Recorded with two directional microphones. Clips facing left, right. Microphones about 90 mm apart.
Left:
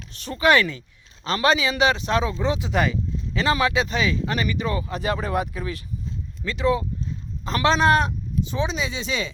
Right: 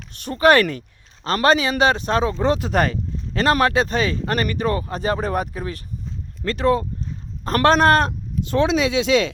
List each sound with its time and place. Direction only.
0.2 s speech: 45° right (ahead or behind)
0.6 s speech: 60° right (ahead or behind)
1.2 s speech: 45° right (ahead or behind); by 9.3 s 75° right (ahead or behind)